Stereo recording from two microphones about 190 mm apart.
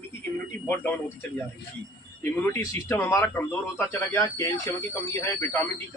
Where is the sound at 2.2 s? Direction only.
10° left (ahead or behind).